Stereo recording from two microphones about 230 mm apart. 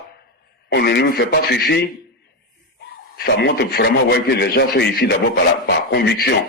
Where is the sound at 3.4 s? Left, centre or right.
Left.